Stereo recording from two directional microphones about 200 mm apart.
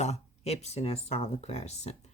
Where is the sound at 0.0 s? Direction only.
35° left (ahead or behind).